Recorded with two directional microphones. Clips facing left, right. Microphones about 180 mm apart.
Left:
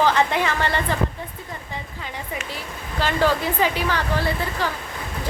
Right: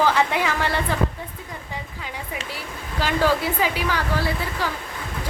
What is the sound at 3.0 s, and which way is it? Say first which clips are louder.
A woman's voice: even; 10° right (ahead or behind).